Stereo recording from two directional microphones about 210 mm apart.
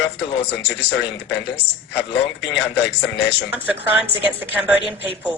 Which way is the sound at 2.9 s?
55° left (ahead or behind).